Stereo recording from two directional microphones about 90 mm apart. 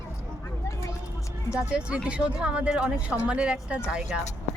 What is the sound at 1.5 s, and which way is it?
Speech, 10° right (ahead or behind).